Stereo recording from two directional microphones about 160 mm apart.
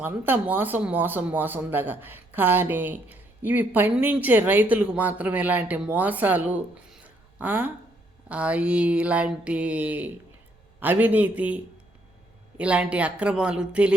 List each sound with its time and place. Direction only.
0.0 s speech: 10° right (ahead or behind)